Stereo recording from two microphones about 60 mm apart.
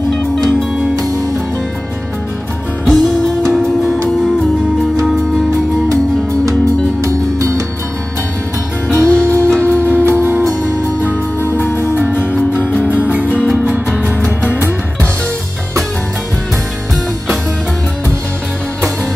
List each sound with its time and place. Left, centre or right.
0.9 s music: right
2.9 s music: centre
7.0 s music: right
8.8 s music: centre
9.2 s music: right
13.0 s music: right